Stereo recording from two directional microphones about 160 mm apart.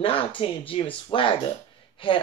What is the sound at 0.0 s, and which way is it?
Speech, 35° left (ahead or behind).